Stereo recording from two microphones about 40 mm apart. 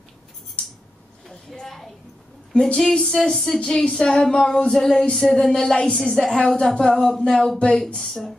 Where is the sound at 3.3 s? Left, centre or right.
Centre.